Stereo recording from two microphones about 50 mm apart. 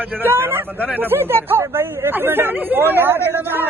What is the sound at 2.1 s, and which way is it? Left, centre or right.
Speech, right.